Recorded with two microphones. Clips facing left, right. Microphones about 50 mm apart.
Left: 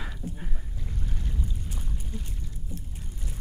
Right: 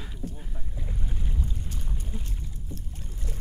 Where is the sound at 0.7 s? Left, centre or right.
Centre.